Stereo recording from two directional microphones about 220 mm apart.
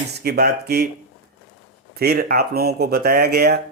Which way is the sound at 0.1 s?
45° right (ahead or behind).